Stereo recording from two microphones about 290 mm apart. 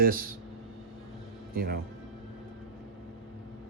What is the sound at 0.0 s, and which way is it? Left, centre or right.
Speech, right.